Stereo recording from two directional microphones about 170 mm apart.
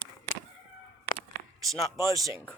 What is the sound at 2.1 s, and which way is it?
Speech, 15° right (ahead or behind).